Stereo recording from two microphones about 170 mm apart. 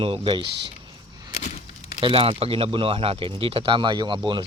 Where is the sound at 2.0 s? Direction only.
30° right (ahead or behind).